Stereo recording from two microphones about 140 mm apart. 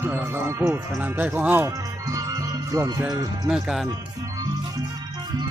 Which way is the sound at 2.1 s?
25° right (ahead or behind).